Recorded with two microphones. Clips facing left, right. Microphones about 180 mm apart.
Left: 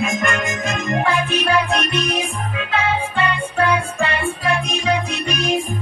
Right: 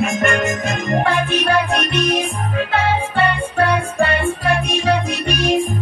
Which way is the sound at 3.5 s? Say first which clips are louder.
Right 1 dB; 45° right (ahead or behind).